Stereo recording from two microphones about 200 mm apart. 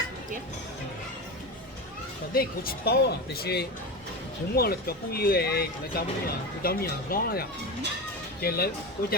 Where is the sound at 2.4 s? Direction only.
50° left (ahead or behind).